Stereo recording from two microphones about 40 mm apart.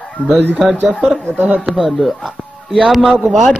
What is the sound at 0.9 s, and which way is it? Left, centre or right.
Speech, right.